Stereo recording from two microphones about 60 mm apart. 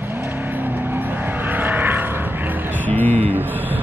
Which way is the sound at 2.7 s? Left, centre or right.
Left.